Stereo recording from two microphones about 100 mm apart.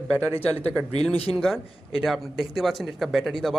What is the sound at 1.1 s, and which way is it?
Speech, 80° left.